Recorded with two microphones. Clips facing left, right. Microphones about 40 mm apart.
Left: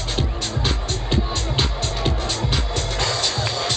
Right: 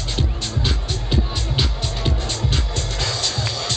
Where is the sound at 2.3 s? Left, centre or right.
Centre.